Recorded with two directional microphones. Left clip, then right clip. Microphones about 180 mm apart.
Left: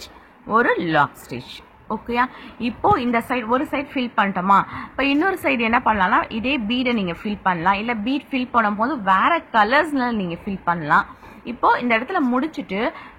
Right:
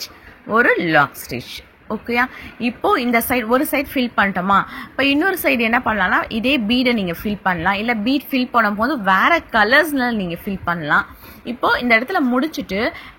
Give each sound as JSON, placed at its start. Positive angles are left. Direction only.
{"t": 0.0, "sound": "a woman's voice", "side_deg": -15}